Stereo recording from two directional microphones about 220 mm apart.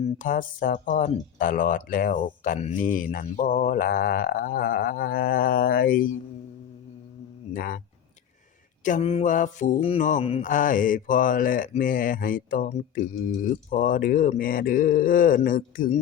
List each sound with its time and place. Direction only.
0.0 s mantra: 35° left (ahead or behind)
7.5 s mantra: 40° left (ahead or behind)
8.8 s mantra: 30° left (ahead or behind)